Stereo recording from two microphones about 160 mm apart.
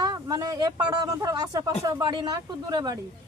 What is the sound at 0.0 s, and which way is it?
Speech, 25° right (ahead or behind).